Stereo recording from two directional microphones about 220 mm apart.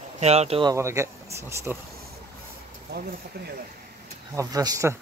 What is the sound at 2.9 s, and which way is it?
Speech, 50° right (ahead or behind).